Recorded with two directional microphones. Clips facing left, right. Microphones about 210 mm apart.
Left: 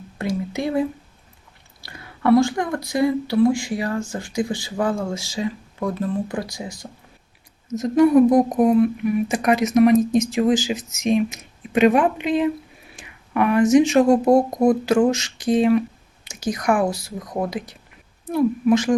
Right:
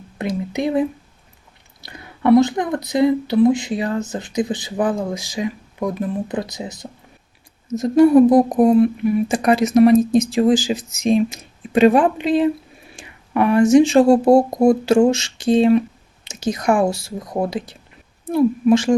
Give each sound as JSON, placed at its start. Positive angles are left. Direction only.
{"t": 0.2, "sound": "speech", "side_deg": -20}